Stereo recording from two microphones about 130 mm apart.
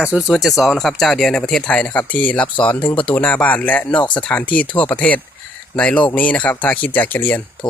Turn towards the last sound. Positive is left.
turn(degrees=35)  # may be behind; listen again after turning